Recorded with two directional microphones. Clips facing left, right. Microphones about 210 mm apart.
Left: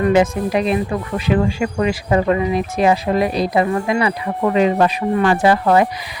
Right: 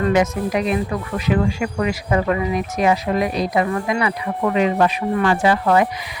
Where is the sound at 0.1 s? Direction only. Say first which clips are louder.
Left 3 dB; 30° left (ahead or behind).